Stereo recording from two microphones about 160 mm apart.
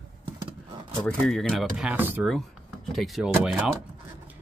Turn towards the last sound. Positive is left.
turn(degrees=-5)  # may be behind; listen again after turning